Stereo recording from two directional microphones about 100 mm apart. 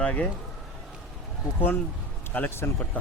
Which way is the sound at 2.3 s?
20° left (ahead or behind).